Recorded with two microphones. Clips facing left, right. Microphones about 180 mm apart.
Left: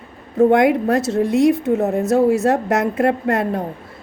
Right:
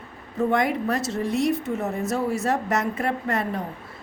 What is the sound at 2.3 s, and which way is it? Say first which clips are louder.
A woman's voice: left 7 dB; 55° left (ahead or behind).